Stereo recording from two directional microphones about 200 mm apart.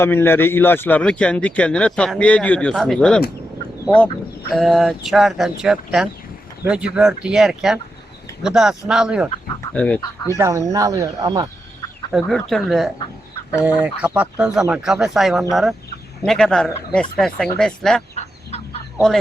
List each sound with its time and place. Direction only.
0.0 s speech: 10° left (ahead or behind)
3.8 s fowl: 5° left (ahead or behind)
4.5 s speech: centre (ahead or behind)
9.7 s fowl: 5° left (ahead or behind)
10.3 s speech: 15° right (ahead or behind)
12.1 s speech: centre (ahead or behind)
18.1 s fowl: 35° left (ahead or behind)